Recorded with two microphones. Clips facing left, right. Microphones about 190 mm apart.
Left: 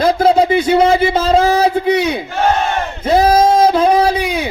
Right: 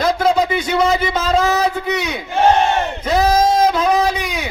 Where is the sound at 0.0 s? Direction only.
30° left (ahead or behind).